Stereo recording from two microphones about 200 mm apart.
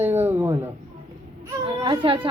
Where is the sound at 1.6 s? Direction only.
25° right (ahead or behind).